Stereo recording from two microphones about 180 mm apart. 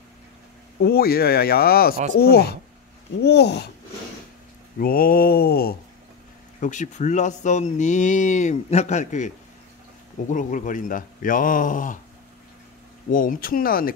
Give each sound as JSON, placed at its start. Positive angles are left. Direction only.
{"t": 0.8, "sound": "speech", "side_deg": 55}
{"t": 4.7, "sound": "speech", "side_deg": 55}
{"t": 6.6, "sound": "speech", "side_deg": 45}
{"t": 13.1, "sound": "speech", "side_deg": 50}